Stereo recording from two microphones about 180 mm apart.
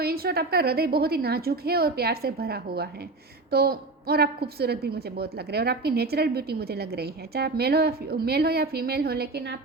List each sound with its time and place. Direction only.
0.0 s a woman's voice: 60° right (ahead or behind)